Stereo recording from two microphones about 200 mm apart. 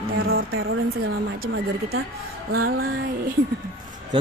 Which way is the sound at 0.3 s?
90° right.